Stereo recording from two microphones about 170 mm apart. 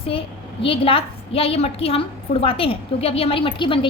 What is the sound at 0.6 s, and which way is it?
A woman's voice, 30° left (ahead or behind).